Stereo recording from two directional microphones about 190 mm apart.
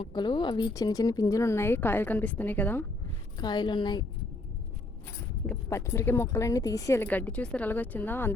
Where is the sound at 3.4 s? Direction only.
20° left (ahead or behind).